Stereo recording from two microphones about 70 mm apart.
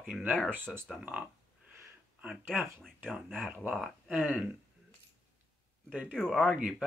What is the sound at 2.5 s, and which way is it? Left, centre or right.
Speech, centre.